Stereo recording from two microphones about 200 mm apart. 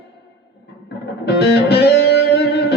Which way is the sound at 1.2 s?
55° left (ahead or behind).